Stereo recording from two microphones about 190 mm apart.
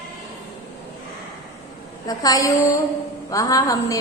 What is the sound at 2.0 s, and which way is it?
A woman's voice, 20° left (ahead or behind).